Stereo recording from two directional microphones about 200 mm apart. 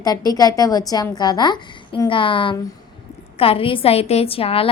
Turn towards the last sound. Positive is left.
turn(degrees=30)  # may be behind; listen again after turning